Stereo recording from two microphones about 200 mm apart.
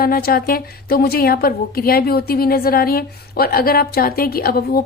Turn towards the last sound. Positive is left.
turn(degrees=50)  # may be behind; listen again after turning